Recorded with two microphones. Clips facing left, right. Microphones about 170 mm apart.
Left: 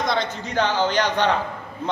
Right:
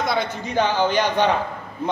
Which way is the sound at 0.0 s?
5° right (ahead or behind).